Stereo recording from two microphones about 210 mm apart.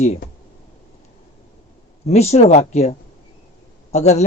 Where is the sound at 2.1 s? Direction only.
30° left (ahead or behind).